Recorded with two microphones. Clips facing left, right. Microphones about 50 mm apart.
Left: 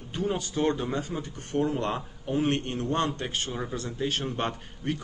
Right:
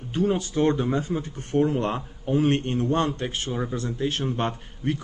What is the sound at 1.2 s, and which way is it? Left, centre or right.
Mantra, right.